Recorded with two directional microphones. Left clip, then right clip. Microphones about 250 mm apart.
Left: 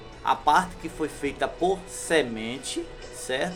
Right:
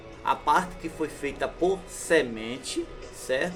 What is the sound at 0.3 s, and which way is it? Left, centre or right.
Speech, centre.